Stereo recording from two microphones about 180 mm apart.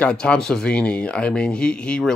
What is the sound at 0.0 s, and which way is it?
Speech, 5° left (ahead or behind).